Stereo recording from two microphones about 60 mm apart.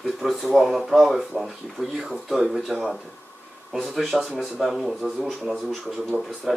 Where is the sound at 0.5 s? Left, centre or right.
Centre.